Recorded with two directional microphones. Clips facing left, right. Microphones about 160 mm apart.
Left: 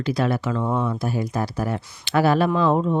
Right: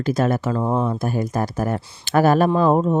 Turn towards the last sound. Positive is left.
turn(degrees=-40)  # may be behind; listen again after turning